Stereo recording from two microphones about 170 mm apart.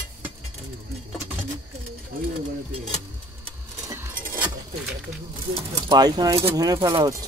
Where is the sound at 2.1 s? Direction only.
60° right (ahead or behind).